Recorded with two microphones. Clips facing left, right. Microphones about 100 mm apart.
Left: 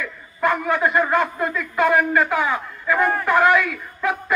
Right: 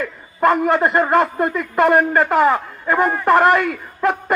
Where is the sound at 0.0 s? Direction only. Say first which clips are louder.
Right 5 dB; 50° right (ahead or behind).